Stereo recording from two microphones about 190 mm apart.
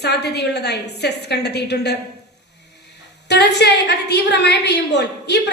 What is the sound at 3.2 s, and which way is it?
A woman's voice, 60° left (ahead or behind).